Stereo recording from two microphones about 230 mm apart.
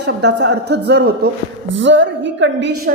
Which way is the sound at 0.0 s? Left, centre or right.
Right.